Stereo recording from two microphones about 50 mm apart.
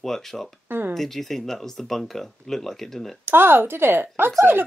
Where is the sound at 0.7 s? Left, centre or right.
Right.